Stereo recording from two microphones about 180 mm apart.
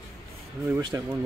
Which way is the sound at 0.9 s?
15° right (ahead or behind).